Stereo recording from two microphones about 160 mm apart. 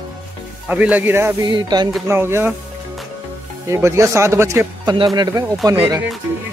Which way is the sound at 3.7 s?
20° right (ahead or behind).